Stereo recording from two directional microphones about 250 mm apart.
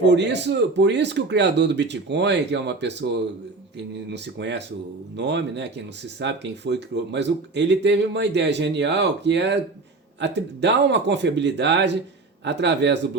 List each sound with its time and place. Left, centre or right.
0.0 s speech: right